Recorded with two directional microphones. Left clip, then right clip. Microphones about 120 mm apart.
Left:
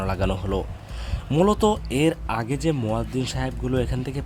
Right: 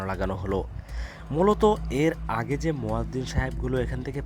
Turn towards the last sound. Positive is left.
turn(degrees=-25)  # may be behind; listen again after turning